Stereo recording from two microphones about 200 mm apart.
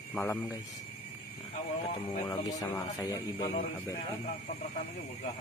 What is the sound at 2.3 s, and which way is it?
Speech, 15° left (ahead or behind).